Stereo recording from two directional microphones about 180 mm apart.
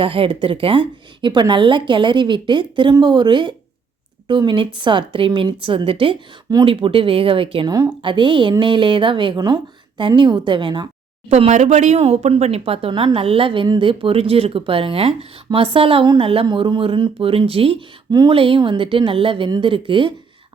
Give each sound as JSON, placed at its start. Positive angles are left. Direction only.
{"t": 0.0, "sound": "a woman's voice", "side_deg": -30}
{"t": 11.3, "sound": "speech", "side_deg": -35}